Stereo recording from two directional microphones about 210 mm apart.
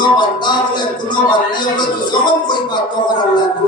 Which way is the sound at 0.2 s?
20° left (ahead or behind).